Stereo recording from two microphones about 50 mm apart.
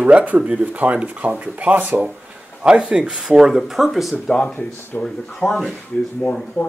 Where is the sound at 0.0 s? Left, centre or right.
Right.